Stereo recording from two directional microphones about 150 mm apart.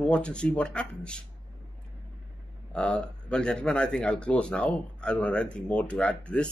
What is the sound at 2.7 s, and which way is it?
Speech, 5° left (ahead or behind).